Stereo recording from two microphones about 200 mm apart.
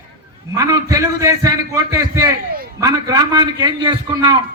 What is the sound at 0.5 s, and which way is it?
A man's voice, 15° right (ahead or behind).